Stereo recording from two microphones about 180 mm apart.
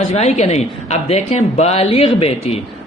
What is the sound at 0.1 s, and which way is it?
Speech, 35° left (ahead or behind).